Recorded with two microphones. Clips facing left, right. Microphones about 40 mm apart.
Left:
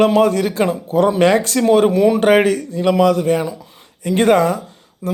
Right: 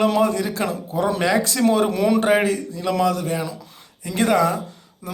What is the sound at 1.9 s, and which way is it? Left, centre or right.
Speech, centre.